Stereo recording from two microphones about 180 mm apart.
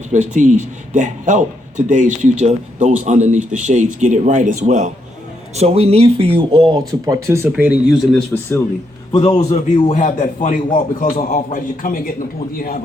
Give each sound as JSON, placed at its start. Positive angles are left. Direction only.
{"t": 0.1, "sound": "a man's voice", "side_deg": -45}
{"t": 8.3, "sound": "a man's voice", "side_deg": 15}
{"t": 9.1, "sound": "a man's voice", "side_deg": 35}